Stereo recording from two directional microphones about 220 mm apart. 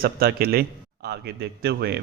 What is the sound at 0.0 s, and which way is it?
Speech, 45° right (ahead or behind).